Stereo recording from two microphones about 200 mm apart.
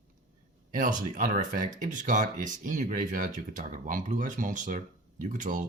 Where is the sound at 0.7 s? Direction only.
40° right (ahead or behind).